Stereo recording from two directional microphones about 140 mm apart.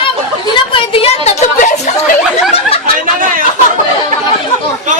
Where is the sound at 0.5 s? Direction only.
40° left (ahead or behind); by 1.7 s 65° left (ahead or behind).